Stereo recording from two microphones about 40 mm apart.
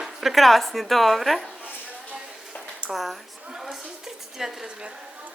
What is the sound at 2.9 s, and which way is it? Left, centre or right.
Speech, centre.